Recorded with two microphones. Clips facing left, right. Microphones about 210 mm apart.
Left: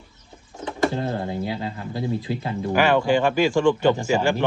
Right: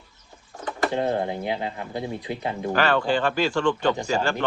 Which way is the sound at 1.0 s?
20° right (ahead or behind).